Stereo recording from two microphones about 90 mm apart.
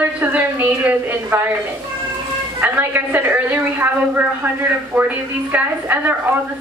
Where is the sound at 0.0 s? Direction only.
20° right (ahead or behind).